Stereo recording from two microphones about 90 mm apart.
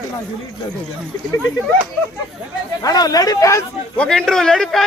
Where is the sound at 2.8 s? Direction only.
45° left (ahead or behind).